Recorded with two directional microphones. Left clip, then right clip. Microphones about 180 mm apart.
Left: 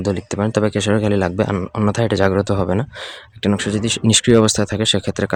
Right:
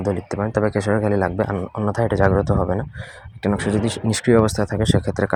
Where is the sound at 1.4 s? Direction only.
35° left (ahead or behind); by 5.3 s 20° left (ahead or behind).